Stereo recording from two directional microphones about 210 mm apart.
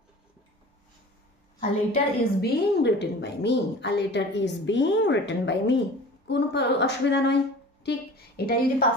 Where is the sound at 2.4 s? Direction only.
50° left (ahead or behind).